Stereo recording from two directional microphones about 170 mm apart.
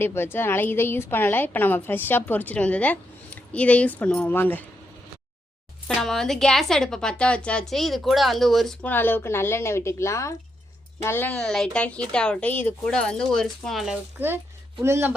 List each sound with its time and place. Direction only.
0.0 s a woman's voice: 15° left (ahead or behind)
5.9 s a woman's voice: centre (ahead or behind); by 15.1 s 15° right (ahead or behind)